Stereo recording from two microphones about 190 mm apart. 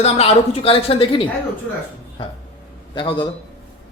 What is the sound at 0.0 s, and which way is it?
A man's voice, 30° left (ahead or behind).